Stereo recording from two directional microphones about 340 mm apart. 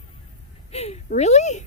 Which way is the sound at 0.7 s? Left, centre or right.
Centre.